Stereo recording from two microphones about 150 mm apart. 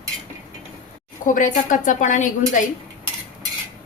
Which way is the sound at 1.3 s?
60° left (ahead or behind).